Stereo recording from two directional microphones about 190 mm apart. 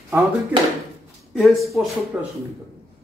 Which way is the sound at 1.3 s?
Centre (ahead or behind).